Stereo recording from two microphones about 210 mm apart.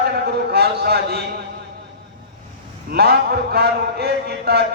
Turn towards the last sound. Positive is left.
turn(degrees=-50)  # may be behind; listen again after turning